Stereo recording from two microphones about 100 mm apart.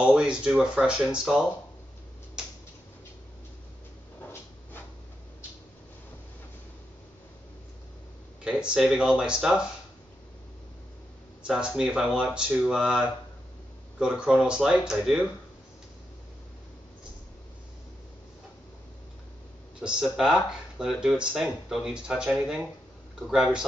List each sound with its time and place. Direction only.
0.0 s speech: 10° right (ahead or behind)
4.2 s cupboard open or close: 20° left (ahead or behind)
8.5 s speech: 10° right (ahead or behind)
11.4 s speech: 5° right (ahead or behind)
19.8 s speech: 5° right (ahead or behind)